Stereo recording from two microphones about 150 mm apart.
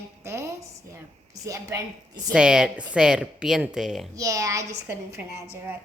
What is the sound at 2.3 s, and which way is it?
A woman's voice, 5° right (ahead or behind).